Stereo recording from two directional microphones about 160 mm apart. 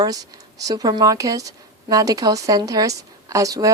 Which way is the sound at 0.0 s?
25° right (ahead or behind).